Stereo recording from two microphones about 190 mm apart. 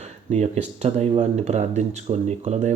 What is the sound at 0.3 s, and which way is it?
Speech, 35° right (ahead or behind).